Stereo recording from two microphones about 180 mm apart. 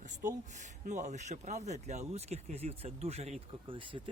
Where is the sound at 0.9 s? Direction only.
40° right (ahead or behind).